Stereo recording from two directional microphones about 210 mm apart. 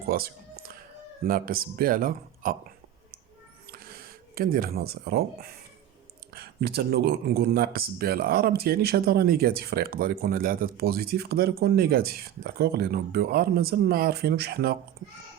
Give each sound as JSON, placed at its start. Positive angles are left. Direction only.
{"t": 0.0, "sound": "music", "side_deg": -45}
{"t": 1.2, "sound": "speech", "side_deg": -45}
{"t": 3.7, "sound": "a sound", "side_deg": -45}
{"t": 6.3, "sound": "speech", "side_deg": -50}